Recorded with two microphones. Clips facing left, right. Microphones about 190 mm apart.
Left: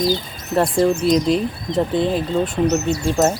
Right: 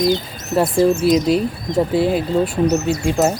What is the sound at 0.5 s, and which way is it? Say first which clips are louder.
Speech: right 2 dB; 5° right (ahead or behind).